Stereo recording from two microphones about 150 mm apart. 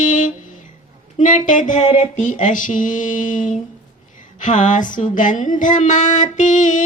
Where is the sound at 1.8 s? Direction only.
40° left (ahead or behind).